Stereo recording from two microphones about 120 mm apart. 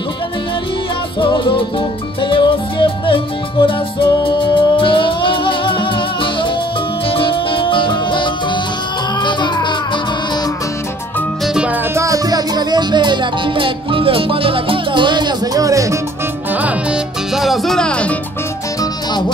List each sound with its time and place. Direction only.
1.2 s music: 45° left (ahead or behind)
11.4 s music: 5° right (ahead or behind)
11.9 s music: 25° right (ahead or behind)
16.6 s music: 5° right (ahead or behind)
18.8 s music: 35° left (ahead or behind)